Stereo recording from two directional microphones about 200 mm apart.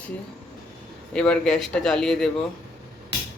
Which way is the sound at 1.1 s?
5° left (ahead or behind).